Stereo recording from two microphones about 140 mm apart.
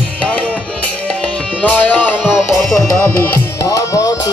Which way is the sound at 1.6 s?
10° left (ahead or behind).